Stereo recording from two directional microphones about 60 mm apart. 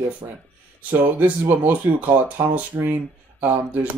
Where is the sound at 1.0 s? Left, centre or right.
Right.